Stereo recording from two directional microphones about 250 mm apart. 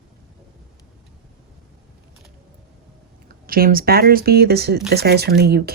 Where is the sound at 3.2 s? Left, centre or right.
Right.